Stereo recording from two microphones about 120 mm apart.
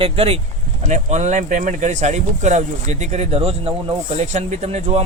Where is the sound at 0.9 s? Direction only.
80° right; by 3.7 s 55° right (ahead or behind).